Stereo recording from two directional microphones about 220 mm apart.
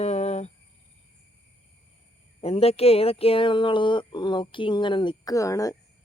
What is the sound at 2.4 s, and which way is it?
Speech, 25° left (ahead or behind).